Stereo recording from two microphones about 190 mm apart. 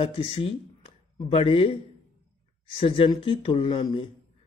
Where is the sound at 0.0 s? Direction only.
30° left (ahead or behind).